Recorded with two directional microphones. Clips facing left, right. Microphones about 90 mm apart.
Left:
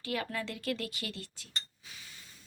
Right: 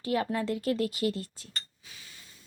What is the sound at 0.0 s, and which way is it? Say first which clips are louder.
Speech: right 7 dB; 25° right (ahead or behind).